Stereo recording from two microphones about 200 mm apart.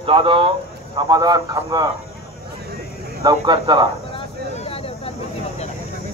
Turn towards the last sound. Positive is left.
turn(degrees=30)  # may be behind; listen again after turning